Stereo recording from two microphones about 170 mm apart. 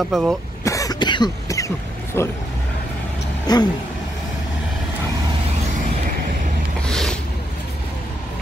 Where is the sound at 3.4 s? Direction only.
25° left (ahead or behind).